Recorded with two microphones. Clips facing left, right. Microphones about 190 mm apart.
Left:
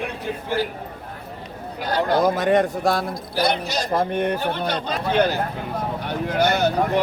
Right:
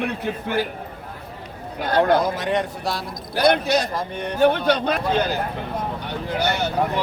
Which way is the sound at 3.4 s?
60° right (ahead or behind).